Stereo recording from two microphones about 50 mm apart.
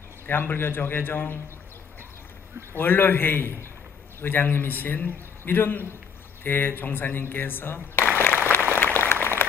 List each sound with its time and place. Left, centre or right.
0.3 s a man's voice: left
2.7 s a man's voice: left
8.7 s applause: left